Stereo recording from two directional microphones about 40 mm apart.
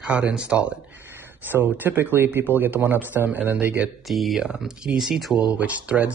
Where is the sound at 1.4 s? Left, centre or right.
Right.